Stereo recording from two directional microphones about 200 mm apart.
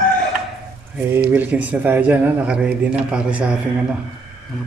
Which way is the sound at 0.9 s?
10° right (ahead or behind).